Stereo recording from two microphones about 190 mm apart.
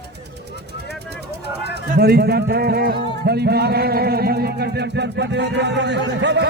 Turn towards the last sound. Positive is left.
turn(degrees=-65)  # may be behind; listen again after turning